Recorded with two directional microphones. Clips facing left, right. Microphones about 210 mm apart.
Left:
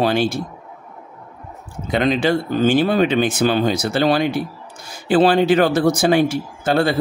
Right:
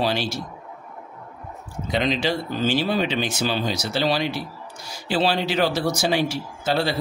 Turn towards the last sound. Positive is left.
turn(degrees=50)  # may be behind; listen again after turning